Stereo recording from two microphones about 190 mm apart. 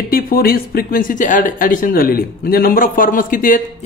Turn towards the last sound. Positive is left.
turn(degrees=45)  # may be behind; listen again after turning